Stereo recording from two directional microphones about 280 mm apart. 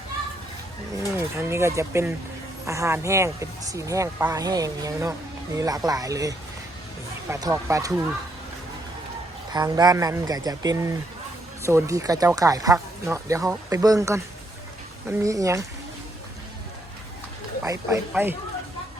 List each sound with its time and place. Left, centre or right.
1.2 s speech: centre
9.5 s speech: centre
17.6 s speech: centre